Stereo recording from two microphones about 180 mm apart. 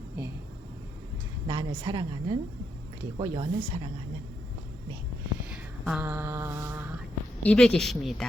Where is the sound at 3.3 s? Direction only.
30° right (ahead or behind).